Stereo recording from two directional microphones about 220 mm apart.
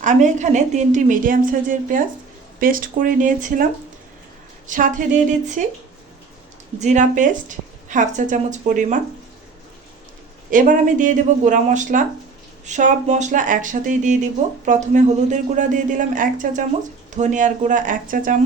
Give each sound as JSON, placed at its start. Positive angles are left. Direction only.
{"t": 0.0, "sound": "speech", "side_deg": -35}
{"t": 6.7, "sound": "speech", "side_deg": -35}
{"t": 10.5, "sound": "speech", "side_deg": -35}